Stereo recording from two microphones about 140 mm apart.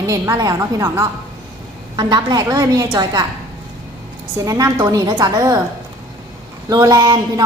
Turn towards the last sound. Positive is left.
turn(degrees=-25)  # may be behind; listen again after turning